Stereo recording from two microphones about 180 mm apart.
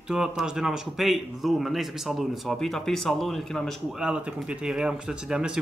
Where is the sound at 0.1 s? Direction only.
5° right (ahead or behind).